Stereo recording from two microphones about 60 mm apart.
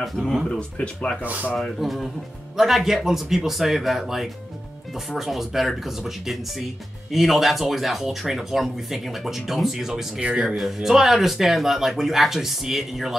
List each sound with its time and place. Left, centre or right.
0.5 s speech: centre
1.2 s speech: right
1.8 s speech: centre